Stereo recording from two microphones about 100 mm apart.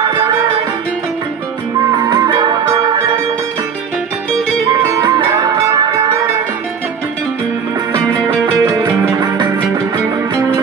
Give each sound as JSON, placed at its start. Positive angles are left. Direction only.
{"t": 0.0, "sound": "music", "side_deg": -45}
{"t": 1.9, "sound": "music", "side_deg": -45}
{"t": 2.6, "sound": "music", "side_deg": -35}
{"t": 5.3, "sound": "music", "side_deg": -35}
{"t": 7.9, "sound": "music", "side_deg": -45}